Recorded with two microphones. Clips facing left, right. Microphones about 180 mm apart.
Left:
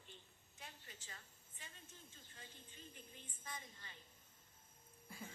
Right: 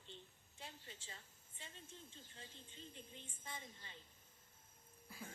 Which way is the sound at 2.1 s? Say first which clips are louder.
Right 2 dB; 25° right (ahead or behind).